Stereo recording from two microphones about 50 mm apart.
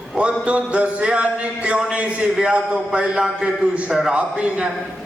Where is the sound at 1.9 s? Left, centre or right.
Right.